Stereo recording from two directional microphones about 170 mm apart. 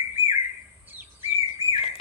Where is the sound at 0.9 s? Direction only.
10° right (ahead or behind).